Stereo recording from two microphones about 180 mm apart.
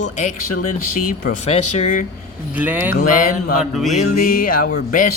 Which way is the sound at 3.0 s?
45° left (ahead or behind).